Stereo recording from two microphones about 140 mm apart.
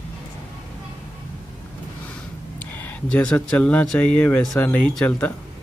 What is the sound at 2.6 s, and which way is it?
Speech, 10° left (ahead or behind).